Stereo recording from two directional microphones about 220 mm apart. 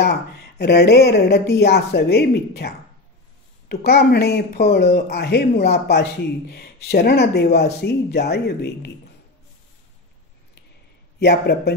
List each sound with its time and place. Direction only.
0.0 s speech: 50° left (ahead or behind)
11.1 s speech: 50° left (ahead or behind)